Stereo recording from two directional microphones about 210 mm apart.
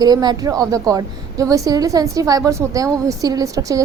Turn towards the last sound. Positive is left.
turn(degrees=-15)  # may be behind; listen again after turning